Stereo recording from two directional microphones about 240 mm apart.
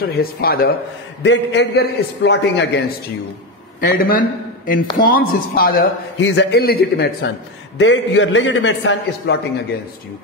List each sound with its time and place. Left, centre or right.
0.1 s a man's voice: left
3.8 s a man's voice: left